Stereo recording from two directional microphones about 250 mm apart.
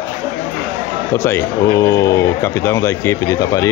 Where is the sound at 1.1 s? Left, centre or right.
Centre.